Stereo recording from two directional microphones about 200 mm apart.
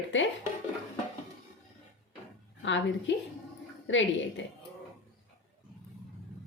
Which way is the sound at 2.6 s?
65° left (ahead or behind).